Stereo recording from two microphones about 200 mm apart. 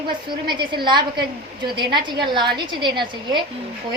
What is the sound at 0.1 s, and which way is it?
A woman's voice, 25° right (ahead or behind).